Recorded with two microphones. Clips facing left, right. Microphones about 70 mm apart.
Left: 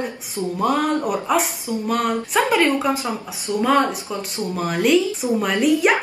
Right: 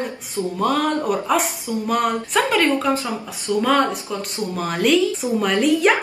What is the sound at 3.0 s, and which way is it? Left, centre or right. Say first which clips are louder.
Speech: left 1 dB; left.